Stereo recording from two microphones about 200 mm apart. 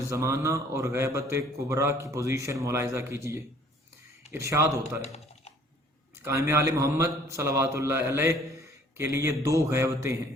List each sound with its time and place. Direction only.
0.1 s a man's voice: 15° right (ahead or behind)
5.0 s computer keyboard: 30° left (ahead or behind)
6.2 s a man's voice: 15° right (ahead or behind)